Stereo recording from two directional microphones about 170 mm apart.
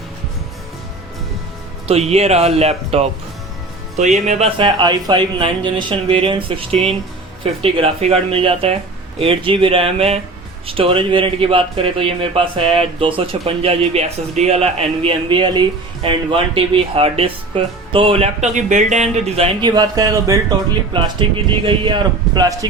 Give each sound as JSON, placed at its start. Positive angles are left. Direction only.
{"t": 1.9, "sound": "speech", "side_deg": -40}
{"t": 19.4, "sound": "a man's voice", "side_deg": -25}